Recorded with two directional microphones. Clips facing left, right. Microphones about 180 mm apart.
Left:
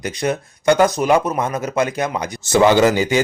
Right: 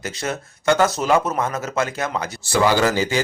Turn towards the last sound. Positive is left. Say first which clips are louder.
# left 5 dB
turn(degrees=20)  # may be behind; listen again after turning